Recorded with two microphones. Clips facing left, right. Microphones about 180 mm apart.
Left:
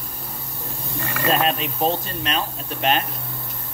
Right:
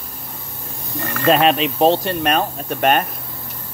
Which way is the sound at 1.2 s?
80° right.